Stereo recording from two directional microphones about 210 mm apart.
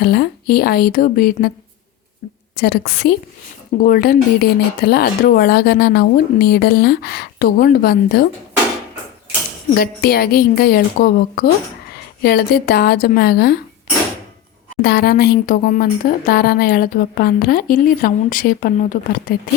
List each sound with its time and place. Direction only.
0.0 s speech: 50° left (ahead or behind)
2.6 s speech: 50° left (ahead or behind)
9.7 s speech: 45° left (ahead or behind)
14.8 s speech: 45° left (ahead or behind)